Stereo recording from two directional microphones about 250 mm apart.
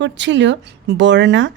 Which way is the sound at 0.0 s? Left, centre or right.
Right.